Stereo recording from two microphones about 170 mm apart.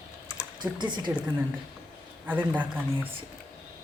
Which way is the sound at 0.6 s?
25° right (ahead or behind).